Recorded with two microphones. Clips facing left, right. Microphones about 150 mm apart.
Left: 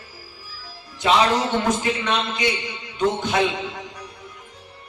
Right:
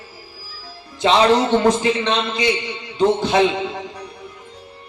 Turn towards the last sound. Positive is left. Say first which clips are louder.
# right 5 dB
turn(degrees=-30)  # may be behind; listen again after turning